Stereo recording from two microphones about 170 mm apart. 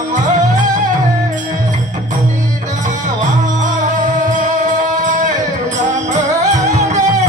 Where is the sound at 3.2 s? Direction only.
45° right (ahead or behind).